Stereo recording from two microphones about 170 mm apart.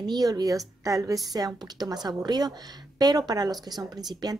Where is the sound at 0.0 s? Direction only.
25° right (ahead or behind).